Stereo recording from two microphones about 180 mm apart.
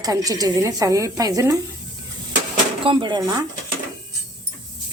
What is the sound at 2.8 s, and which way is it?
Speech, 25° right (ahead or behind).